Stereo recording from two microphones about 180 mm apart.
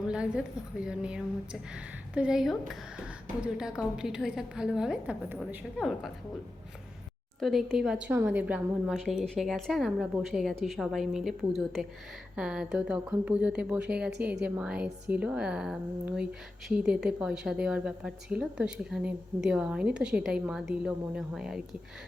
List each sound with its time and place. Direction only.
0.1 s a woman's voice: 5° right (ahead or behind)
7.3 s a woman's voice: centre (ahead or behind)